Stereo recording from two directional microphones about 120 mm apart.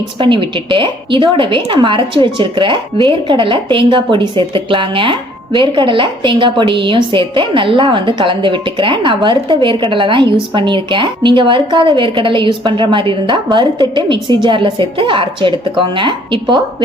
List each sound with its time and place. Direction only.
0.2 s a woman's voice: 45° right (ahead or behind)